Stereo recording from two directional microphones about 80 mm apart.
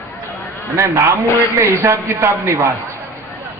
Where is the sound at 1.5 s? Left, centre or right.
Right.